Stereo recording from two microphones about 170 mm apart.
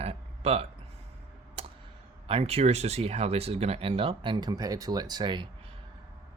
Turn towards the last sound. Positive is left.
turn(degrees=-25)  # may be behind; listen again after turning